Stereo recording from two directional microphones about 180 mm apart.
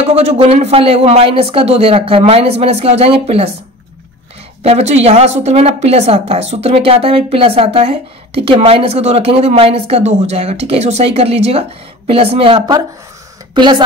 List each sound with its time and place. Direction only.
0.0 s speech: 35° right (ahead or behind)
4.6 s a woman's voice: 35° right (ahead or behind)